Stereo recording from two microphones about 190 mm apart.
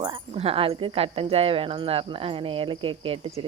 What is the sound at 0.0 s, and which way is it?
Speech, 30° right (ahead or behind).